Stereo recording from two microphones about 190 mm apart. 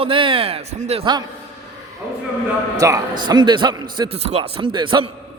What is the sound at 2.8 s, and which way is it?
Speech, 15° right (ahead or behind).